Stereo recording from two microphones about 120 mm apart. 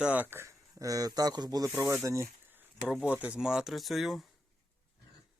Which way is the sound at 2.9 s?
5° right (ahead or behind).